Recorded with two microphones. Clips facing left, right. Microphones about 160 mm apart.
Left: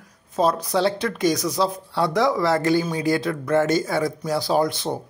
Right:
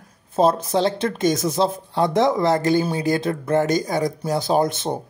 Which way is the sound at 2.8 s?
35° right (ahead or behind).